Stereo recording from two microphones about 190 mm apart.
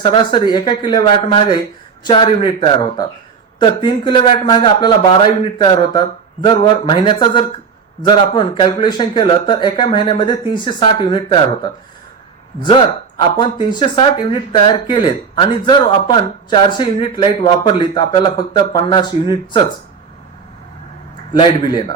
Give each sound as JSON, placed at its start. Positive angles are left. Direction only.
{"t": 0.0, "sound": "speech", "side_deg": 25}
{"t": 21.3, "sound": "speech", "side_deg": 25}